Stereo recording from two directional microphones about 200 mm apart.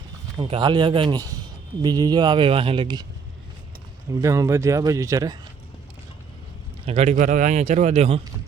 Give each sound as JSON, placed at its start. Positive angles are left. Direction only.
{"t": 0.3, "sound": "speech", "side_deg": -25}
{"t": 4.2, "sound": "speech", "side_deg": -15}
{"t": 6.8, "sound": "speech", "side_deg": -30}